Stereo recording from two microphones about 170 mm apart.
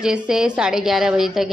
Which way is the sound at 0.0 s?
5° right (ahead or behind).